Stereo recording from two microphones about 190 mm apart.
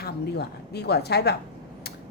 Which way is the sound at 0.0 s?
60° left (ahead or behind).